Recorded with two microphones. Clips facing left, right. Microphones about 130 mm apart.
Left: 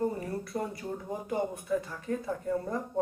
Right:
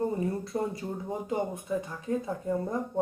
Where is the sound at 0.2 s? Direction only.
25° right (ahead or behind).